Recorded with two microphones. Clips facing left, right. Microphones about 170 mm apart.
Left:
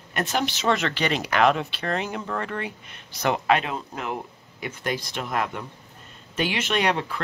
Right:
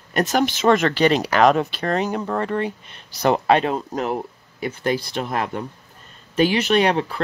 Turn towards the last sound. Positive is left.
turn(degrees=-35)  # may be behind; listen again after turning